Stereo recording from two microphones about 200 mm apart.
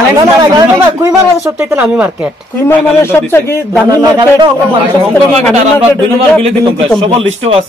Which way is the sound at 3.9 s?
20° right (ahead or behind).